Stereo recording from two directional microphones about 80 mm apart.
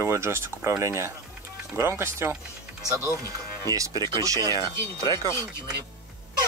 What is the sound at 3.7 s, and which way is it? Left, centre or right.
Speech, right.